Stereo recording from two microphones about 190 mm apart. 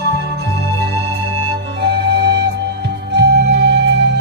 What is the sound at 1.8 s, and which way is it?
Music, 65° right (ahead or behind).